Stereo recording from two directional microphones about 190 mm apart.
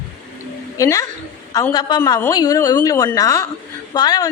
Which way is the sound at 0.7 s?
15° left (ahead or behind).